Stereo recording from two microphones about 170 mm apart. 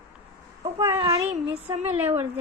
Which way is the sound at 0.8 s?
15° right (ahead or behind).